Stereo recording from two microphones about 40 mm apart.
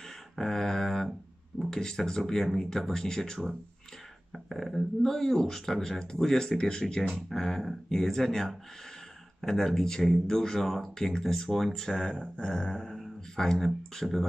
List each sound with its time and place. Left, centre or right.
0.4 s a sound: centre
1.7 s speech: centre
4.5 s speech: centre
7.2 s speech: centre